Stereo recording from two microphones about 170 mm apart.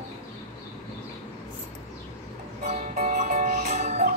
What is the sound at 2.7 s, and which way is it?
Music, 50° right (ahead or behind).